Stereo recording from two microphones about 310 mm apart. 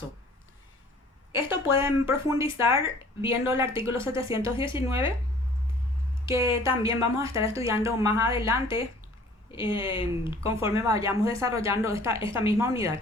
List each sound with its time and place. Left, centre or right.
1.3 s speech: centre
4.5 s speech: centre
6.2 s speech: centre
9.5 s speech: centre
10.4 s speech: centre